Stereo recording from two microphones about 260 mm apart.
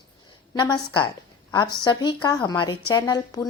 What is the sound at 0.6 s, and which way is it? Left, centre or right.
A woman's voice, centre.